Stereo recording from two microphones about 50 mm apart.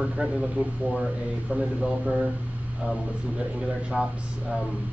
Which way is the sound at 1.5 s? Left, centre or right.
Centre.